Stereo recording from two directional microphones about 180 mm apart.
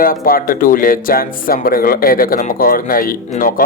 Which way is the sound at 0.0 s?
50° left (ahead or behind).